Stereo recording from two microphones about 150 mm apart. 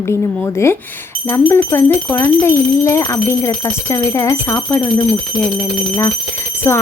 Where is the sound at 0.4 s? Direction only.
15° left (ahead or behind).